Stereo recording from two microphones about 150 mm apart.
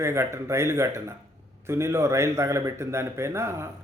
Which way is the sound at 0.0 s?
20° right (ahead or behind).